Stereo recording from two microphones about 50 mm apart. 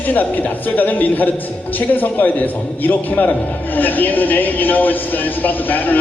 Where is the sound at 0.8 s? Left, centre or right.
Left.